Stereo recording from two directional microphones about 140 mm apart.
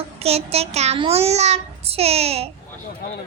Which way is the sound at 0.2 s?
45° right (ahead or behind).